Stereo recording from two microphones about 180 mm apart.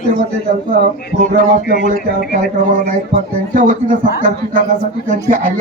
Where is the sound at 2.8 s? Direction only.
50° right (ahead or behind).